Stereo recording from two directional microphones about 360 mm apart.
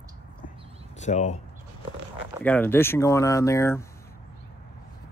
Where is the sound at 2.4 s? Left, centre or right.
Centre.